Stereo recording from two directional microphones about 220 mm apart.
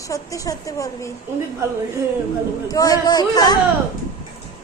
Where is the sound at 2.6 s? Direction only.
15° left (ahead or behind).